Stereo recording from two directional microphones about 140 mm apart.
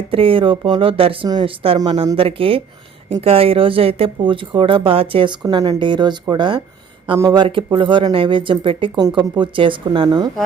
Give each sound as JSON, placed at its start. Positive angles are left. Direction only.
{"t": 0.1, "sound": "speech", "side_deg": -40}
{"t": 9.0, "sound": "speech", "side_deg": -25}